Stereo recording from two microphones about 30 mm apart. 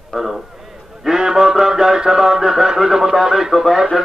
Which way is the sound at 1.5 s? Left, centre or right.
Centre.